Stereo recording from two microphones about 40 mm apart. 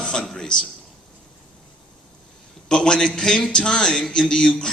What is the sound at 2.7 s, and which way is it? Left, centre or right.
A man's voice, centre.